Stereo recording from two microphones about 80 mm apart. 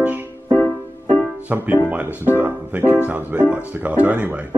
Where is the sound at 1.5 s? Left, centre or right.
Right.